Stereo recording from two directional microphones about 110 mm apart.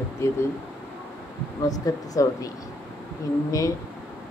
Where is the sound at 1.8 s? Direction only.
30° left (ahead or behind).